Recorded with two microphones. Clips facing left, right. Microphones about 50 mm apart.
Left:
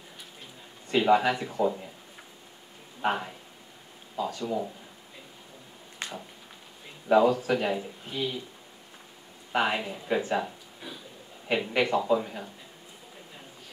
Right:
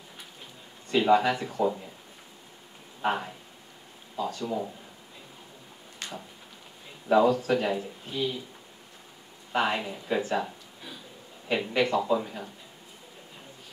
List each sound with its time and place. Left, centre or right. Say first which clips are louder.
0.8 s speech: even; centre
3.0 s speech: even; centre
6.0 s a sound: left 2 dB; left
7.1 s speech: even; centre
9.5 s speech: even; centre